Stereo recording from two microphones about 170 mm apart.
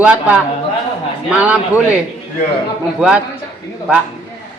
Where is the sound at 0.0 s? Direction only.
10° right (ahead or behind).